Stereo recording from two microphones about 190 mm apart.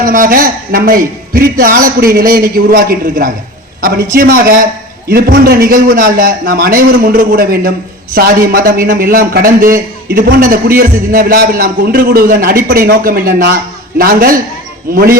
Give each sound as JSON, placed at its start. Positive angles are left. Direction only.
{"t": 0.0, "sound": "a man's voice", "side_deg": -45}